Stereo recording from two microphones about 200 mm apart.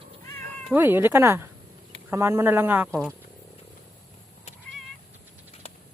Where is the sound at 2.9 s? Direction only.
5° left (ahead or behind).